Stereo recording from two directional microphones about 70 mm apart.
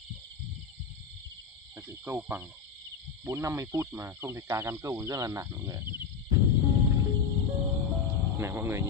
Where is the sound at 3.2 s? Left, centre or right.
Right.